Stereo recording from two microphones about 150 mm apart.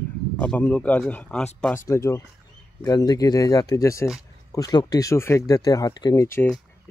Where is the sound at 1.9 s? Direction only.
20° left (ahead or behind).